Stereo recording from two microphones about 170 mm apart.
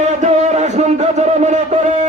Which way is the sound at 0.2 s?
45° right (ahead or behind).